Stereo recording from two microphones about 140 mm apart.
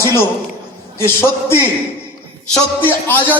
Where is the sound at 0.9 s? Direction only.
15° left (ahead or behind).